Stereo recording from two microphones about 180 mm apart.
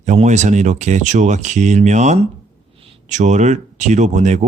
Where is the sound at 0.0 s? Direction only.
40° right (ahead or behind).